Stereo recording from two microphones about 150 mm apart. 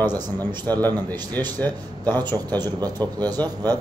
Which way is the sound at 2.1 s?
25° right (ahead or behind).